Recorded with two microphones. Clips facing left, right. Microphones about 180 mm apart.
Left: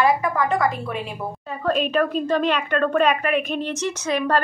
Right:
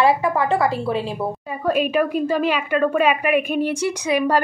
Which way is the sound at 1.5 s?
10° right (ahead or behind).